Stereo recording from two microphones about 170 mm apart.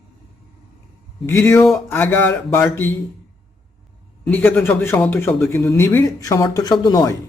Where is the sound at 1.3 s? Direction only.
15° left (ahead or behind).